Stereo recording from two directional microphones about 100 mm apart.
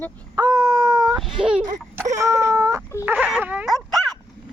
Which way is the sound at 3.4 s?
15° right (ahead or behind).